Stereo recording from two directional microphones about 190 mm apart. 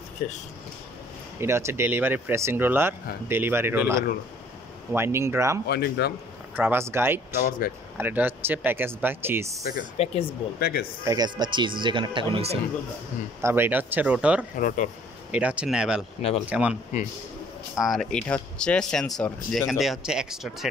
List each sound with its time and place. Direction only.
1.4 s speech: 15° right (ahead or behind)
5.7 s a man's voice: 60° left (ahead or behind)
6.5 s speech: 10° right (ahead or behind)
7.6 s speech: 50° left (ahead or behind)
8.0 s speech: 10° right (ahead or behind)
9.7 s speech: 40° left (ahead or behind)
10.6 s speech: 55° left (ahead or behind)
11.1 s speech: 20° right (ahead or behind)
13.4 s speech: 10° right (ahead or behind)
14.6 s speech: 45° left (ahead or behind)
15.3 s speech: 5° right (ahead or behind)
16.2 s speech: 30° left (ahead or behind)
16.4 s speech: 5° right (ahead or behind)
17.7 s speech: centre (ahead or behind)